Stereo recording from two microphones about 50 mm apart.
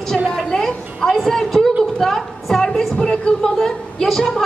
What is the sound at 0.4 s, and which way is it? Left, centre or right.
Music, centre.